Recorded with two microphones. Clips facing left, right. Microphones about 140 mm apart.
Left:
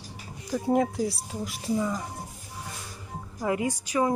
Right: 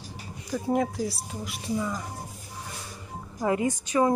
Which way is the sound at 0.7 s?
25° left (ahead or behind).